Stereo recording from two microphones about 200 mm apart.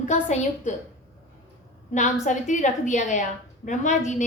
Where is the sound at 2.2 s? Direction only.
40° left (ahead or behind).